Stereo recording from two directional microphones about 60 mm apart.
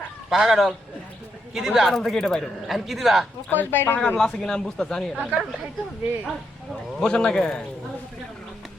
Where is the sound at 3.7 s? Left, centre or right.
Left.